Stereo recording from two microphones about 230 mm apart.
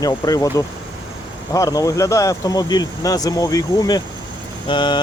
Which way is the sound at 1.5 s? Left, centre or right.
Centre.